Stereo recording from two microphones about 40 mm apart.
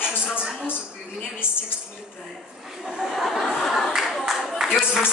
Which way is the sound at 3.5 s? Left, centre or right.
Centre.